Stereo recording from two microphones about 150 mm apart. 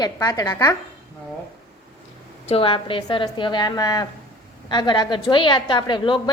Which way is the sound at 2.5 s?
35° left (ahead or behind).